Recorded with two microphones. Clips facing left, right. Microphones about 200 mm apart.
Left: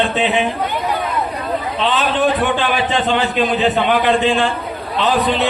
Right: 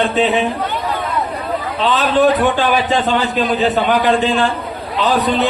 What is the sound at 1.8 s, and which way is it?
A man's voice, 40° right (ahead or behind).